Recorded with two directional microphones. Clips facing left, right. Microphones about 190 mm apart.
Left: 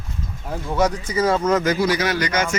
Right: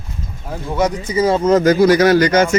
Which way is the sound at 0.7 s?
20° right (ahead or behind).